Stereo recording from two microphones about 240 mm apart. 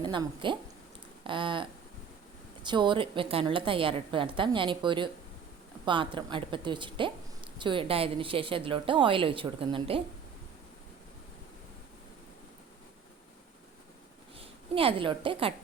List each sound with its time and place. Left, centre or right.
0.0 s a woman's voice: centre
2.6 s a woman's voice: centre
14.3 s a woman's voice: right